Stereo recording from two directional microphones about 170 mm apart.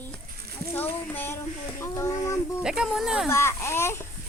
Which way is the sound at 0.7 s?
10° left (ahead or behind).